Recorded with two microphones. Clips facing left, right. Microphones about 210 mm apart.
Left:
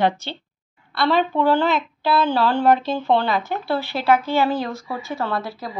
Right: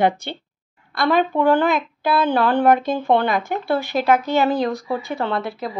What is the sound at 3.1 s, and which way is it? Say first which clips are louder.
Speech: right 1 dB; 50° right (ahead or behind).